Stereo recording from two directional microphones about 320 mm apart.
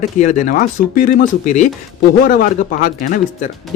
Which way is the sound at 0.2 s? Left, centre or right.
Left.